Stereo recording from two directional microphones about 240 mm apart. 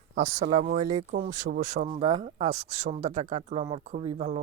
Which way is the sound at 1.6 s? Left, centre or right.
Right.